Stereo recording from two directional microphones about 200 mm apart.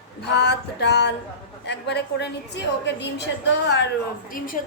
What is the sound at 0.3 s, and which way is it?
A woman's voice, 55° left (ahead or behind).